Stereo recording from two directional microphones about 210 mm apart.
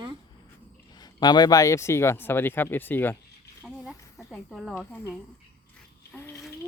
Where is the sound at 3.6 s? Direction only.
Centre (ahead or behind).